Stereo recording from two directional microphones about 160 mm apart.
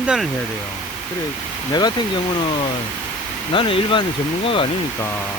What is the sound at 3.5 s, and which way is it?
Speech, 30° left (ahead or behind).